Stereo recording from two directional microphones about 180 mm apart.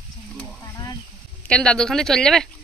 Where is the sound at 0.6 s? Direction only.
20° left (ahead or behind).